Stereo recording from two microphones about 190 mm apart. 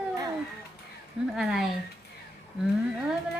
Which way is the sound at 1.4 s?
Centre (ahead or behind).